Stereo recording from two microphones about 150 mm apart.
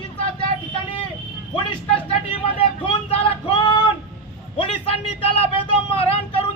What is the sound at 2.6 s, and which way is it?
Vehicle, 40° left (ahead or behind).